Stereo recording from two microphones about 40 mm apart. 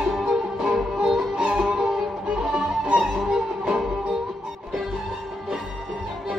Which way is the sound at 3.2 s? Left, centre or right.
Centre.